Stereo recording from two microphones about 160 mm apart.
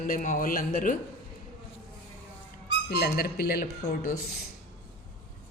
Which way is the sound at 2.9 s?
85° left.